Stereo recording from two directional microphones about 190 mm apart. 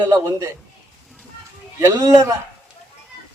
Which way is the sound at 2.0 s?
15° right (ahead or behind).